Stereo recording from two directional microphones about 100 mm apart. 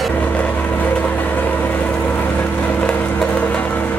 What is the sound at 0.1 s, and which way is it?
Vehicle, 15° left (ahead or behind).